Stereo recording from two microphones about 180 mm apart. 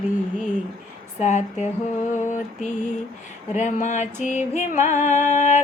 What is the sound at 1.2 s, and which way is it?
Music, 40° left (ahead or behind).